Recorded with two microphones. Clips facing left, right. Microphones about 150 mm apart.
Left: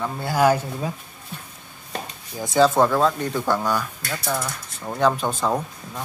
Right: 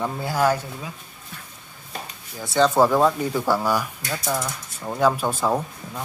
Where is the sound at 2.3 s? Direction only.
15° left (ahead or behind).